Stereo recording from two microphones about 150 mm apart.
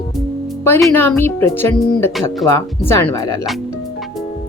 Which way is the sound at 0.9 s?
15° left (ahead or behind).